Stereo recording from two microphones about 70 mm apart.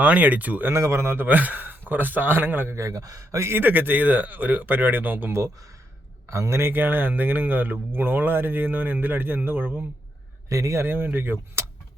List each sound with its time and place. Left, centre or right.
0.0 s speech: right
0.7 s speech: right
2.7 s speech: right
3.5 s speech: right
6.3 s speech: right
6.6 s speech: right
10.5 s speech: right